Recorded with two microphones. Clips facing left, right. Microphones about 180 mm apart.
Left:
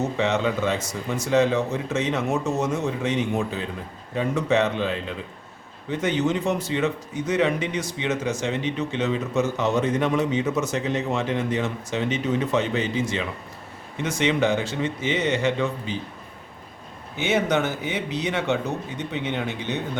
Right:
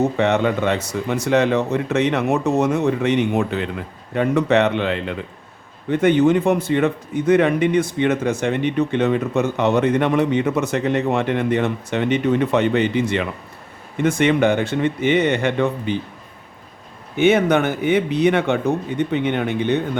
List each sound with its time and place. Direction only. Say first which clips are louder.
0.2 s a man's voice: right 5 dB; 60° right (ahead or behind)
5.9 s a man's voice: right 8 dB; 55° right (ahead or behind)
17.2 s a man's voice: right 7 dB; 55° right (ahead or behind)